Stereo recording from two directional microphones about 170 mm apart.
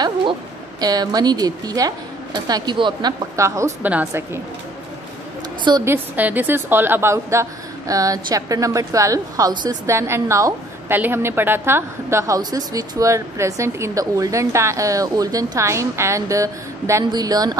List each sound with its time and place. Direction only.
0.0 s speech: 25° right (ahead or behind)
5.6 s a woman's voice: 25° right (ahead or behind)
5.9 s a woman's voice: 10° right (ahead or behind)